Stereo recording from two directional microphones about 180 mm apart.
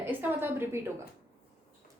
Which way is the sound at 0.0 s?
10° right (ahead or behind).